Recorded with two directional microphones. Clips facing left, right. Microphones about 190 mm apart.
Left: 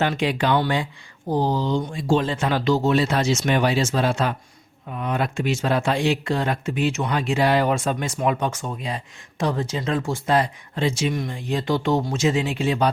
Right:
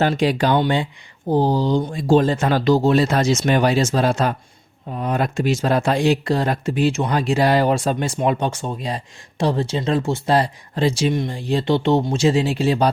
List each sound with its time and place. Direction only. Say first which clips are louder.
0.0 s speech: right 4 dB; 40° right (ahead or behind)
0.5 s speech: right 3 dB; 25° right (ahead or behind)